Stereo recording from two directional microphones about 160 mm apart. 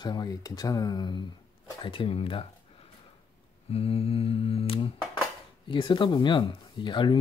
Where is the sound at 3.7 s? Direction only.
40° left (ahead or behind).